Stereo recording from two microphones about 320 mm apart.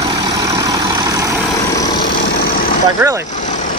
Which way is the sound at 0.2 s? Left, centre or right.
Centre.